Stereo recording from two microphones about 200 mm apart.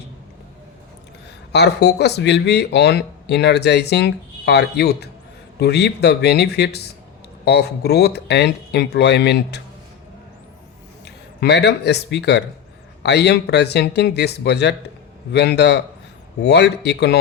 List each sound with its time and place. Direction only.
1.5 s speech: 55° left (ahead or behind)
11.0 s speech: 55° left (ahead or behind)